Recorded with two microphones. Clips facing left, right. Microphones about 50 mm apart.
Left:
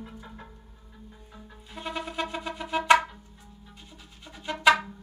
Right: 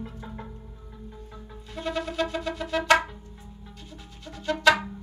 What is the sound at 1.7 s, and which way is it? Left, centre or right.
Music, centre.